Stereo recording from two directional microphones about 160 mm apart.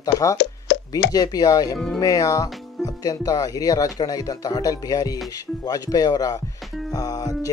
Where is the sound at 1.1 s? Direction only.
25° left (ahead or behind).